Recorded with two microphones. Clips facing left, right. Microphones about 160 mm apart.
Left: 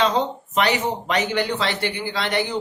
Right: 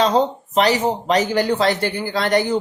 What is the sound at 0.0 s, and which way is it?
Speech, 40° right (ahead or behind).